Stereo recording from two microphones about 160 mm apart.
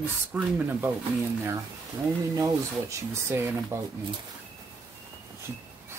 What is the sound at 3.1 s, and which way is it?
Speech, 15° right (ahead or behind).